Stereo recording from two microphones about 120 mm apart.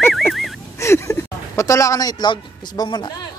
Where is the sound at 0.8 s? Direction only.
25° left (ahead or behind).